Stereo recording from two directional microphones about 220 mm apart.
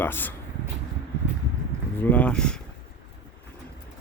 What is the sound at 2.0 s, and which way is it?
Speech, 5° left (ahead or behind).